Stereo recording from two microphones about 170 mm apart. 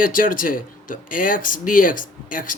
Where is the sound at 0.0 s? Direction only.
50° left (ahead or behind).